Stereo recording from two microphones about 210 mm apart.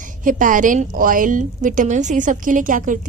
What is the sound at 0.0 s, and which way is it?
A woman's voice, 40° right (ahead or behind).